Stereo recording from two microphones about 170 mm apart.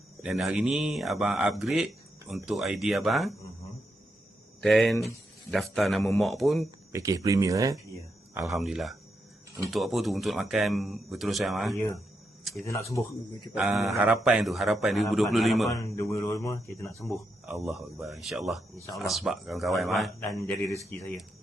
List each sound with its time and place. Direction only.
0.2 s speech: 5° right (ahead or behind)
4.6 s speech: centre (ahead or behind)
6.9 s speech: 20° right (ahead or behind)
8.4 s speech: 5° right (ahead or behind)
12.6 s speech: 15° left (ahead or behind)
13.5 s speech: 5° right (ahead or behind)
16.0 s speech: 15° left (ahead or behind)
17.4 s speech: 5° right (ahead or behind)
20.1 s speech: 10° left (ahead or behind)